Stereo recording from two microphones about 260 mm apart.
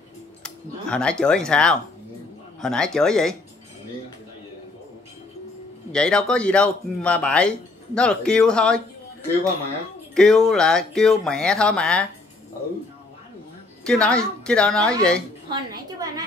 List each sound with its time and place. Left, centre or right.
0.4 s speech: centre
5.9 s speech: centre
10.1 s speech: centre
13.8 s speech: centre
15.5 s a woman's voice: centre